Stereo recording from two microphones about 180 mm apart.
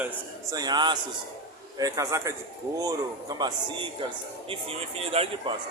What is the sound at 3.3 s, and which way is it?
Speech, 25° right (ahead or behind).